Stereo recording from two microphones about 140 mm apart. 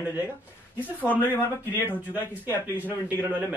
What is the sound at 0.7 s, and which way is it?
Speech, 10° left (ahead or behind).